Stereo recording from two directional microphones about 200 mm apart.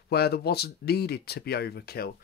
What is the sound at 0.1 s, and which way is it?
Speech, 55° left (ahead or behind).